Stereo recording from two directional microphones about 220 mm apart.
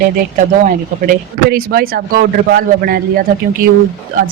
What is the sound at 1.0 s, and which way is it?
A man's voice, 40° right (ahead or behind).